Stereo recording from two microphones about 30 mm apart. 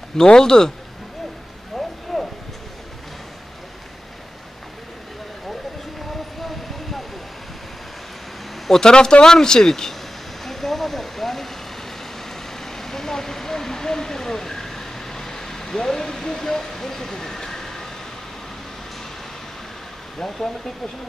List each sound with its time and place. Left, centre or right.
0.2 s speech: left
1.8 s a sound: centre
8.8 s speech: left
10.4 s a sound: centre
12.5 s vehicle: centre
20.2 s speech: centre